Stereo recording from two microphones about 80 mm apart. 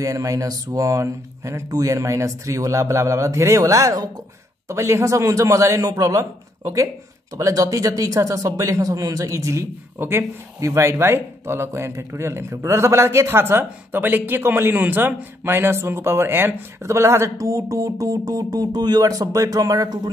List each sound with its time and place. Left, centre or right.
0.0 s speech: right